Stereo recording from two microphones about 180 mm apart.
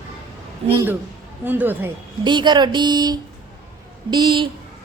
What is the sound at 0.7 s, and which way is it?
A woman's voice, 15° right (ahead or behind).